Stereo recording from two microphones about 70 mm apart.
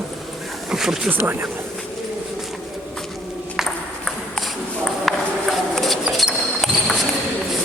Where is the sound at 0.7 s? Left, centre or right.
Centre.